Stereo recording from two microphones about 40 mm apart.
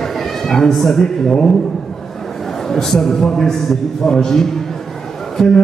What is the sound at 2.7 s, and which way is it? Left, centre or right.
A man's voice, centre.